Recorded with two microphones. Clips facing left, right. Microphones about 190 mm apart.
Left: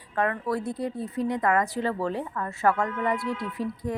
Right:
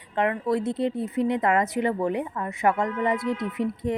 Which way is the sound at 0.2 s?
20° right (ahead or behind).